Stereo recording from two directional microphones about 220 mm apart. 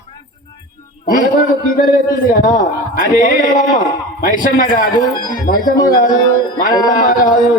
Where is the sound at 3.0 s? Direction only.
40° left (ahead or behind).